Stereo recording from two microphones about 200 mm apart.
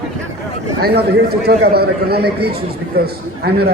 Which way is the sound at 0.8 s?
50° right (ahead or behind).